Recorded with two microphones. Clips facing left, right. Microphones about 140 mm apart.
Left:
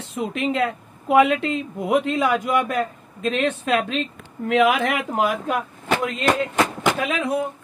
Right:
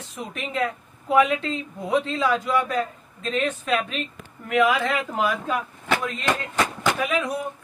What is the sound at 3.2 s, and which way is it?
Speech, 70° left (ahead or behind).